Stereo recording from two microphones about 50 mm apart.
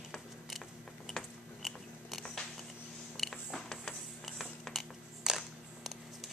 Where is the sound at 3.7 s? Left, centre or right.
Centre.